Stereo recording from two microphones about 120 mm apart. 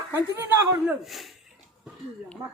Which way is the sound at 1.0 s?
Centre (ahead or behind).